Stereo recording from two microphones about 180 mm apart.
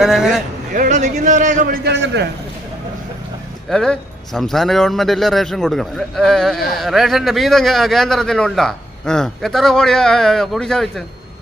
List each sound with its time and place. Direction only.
0.0 s a man's voice: 5° right (ahead or behind)
0.7 s a man's voice: 45° right (ahead or behind); by 2.3 s 70° right (ahead or behind)
3.7 s a man's voice: centre (ahead or behind)